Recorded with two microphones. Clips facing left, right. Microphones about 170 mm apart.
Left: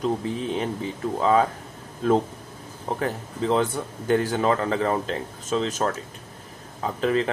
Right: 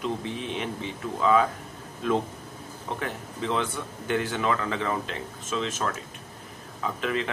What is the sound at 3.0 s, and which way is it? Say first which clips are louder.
Speech: left 6 dB; 35° left (ahead or behind).